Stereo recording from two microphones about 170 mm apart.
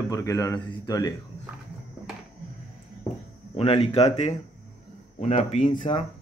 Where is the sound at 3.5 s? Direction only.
35° left (ahead or behind).